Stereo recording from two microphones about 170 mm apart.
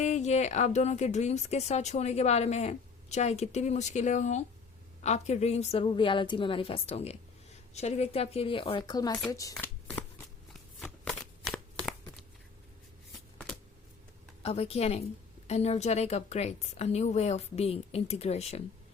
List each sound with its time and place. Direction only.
0.0 s a woman's voice: 40° left (ahead or behind); by 9.6 s 20° left (ahead or behind)
10.8 s shuffling cards: 5° left (ahead or behind)
14.4 s a woman's voice: 35° left (ahead or behind)